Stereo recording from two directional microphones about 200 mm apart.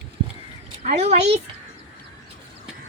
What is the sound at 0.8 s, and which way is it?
Speech, 35° right (ahead or behind).